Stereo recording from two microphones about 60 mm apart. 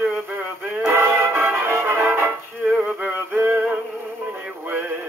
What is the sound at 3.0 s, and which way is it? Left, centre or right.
Music, right.